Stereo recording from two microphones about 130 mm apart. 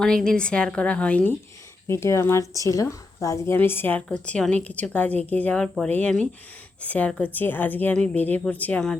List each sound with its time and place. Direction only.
0.0 s speech: 5° left (ahead or behind)
1.9 s speech: 20° left (ahead or behind)